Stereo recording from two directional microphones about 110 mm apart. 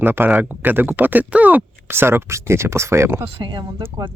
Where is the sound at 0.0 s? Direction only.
20° right (ahead or behind).